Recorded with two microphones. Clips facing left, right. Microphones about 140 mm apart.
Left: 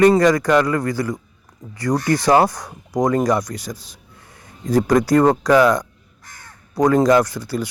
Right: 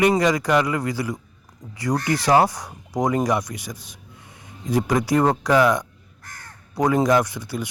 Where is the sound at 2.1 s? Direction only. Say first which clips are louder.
Left 3 dB; 30° left (ahead or behind).